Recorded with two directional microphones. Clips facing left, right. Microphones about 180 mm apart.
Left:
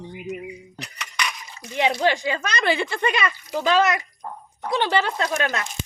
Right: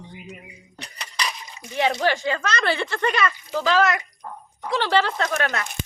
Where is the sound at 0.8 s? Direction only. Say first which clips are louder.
Right 1 dB; 30° right (ahead or behind).